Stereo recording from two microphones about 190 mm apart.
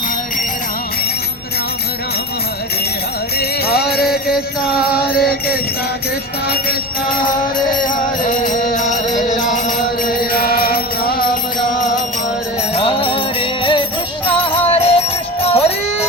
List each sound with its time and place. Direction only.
3.3 s music: 55° left (ahead or behind)
6.5 s music: 50° left (ahead or behind)
12.7 s music: 30° left (ahead or behind)